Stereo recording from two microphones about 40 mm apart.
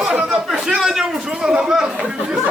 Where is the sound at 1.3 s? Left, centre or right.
Centre.